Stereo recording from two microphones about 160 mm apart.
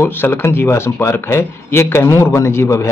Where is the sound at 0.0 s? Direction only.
15° left (ahead or behind).